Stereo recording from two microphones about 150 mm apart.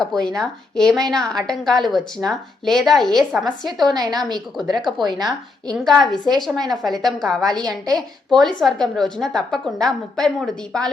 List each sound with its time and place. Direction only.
0.0 s a woman's voice: 5° left (ahead or behind)
3.9 s a woman's voice: 25° right (ahead or behind)
5.6 s a woman's voice: centre (ahead or behind)
7.9 s a woman's voice: 25° right (ahead or behind)
8.4 s a woman's voice: 5° left (ahead or behind)